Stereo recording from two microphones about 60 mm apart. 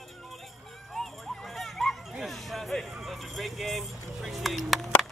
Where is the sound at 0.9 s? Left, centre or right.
Centre.